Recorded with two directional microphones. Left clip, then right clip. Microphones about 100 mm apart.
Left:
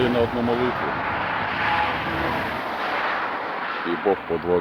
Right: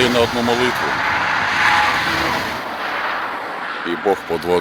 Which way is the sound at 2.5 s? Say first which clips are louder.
Right 2 dB; 10° right (ahead or behind).